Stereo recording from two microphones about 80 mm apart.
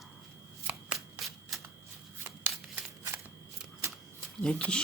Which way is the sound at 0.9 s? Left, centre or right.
Centre.